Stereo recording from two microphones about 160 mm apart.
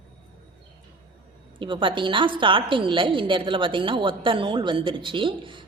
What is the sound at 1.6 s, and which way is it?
A woman's voice, 30° right (ahead or behind).